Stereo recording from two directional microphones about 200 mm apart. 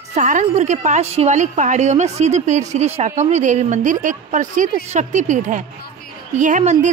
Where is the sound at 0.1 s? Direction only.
40° right (ahead or behind).